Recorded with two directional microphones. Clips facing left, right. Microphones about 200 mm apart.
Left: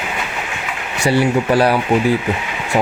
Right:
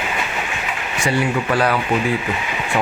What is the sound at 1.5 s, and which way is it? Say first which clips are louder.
Speech: left 4 dB; 30° left (ahead or behind).